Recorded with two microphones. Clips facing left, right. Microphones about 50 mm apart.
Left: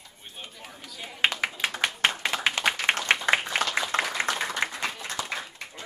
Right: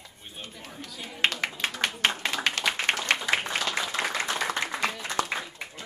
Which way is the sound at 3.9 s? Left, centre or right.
Left.